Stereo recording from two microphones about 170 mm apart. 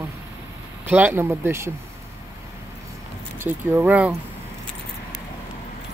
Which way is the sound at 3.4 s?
10° right (ahead or behind).